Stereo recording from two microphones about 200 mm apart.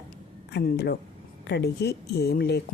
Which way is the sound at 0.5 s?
55° left (ahead or behind).